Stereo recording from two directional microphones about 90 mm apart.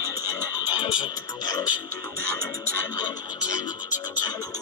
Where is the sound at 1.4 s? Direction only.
45° left (ahead or behind).